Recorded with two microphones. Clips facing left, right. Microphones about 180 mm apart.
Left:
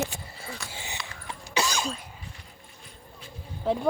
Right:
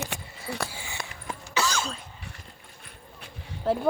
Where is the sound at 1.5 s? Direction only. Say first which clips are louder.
Even; 15° left (ahead or behind).